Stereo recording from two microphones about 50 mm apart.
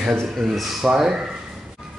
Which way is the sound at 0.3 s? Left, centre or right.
Centre.